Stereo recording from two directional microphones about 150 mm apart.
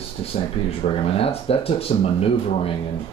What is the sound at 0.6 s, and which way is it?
Speech, 40° left (ahead or behind).